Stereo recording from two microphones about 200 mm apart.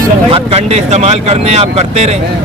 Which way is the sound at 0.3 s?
30° right (ahead or behind).